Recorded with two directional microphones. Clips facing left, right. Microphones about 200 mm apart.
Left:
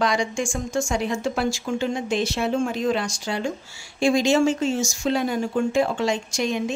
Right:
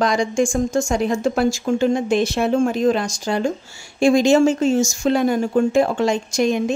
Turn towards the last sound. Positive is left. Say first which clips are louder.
# right 6 dB
turn(degrees=-50)  # may be behind; listen again after turning